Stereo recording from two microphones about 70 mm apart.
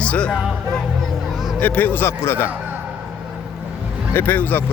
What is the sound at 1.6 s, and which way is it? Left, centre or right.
Speech, left.